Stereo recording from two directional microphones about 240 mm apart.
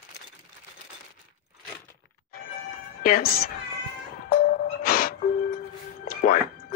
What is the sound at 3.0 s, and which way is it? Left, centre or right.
Speech, left.